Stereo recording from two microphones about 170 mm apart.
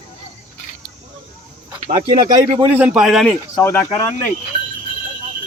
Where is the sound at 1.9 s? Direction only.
25° right (ahead or behind).